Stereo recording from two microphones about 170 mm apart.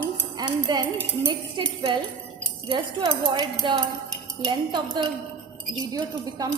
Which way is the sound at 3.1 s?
25° right (ahead or behind).